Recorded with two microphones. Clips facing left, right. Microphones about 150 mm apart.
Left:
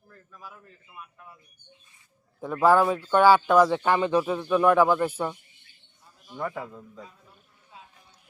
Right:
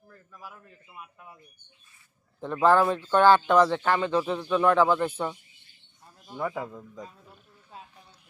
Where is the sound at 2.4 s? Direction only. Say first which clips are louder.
Left 1 dB; 10° left (ahead or behind).